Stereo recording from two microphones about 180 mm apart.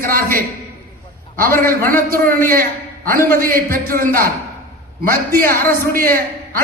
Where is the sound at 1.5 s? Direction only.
10° left (ahead or behind).